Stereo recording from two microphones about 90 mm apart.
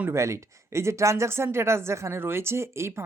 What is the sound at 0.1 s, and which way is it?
Speech, 30° right (ahead or behind).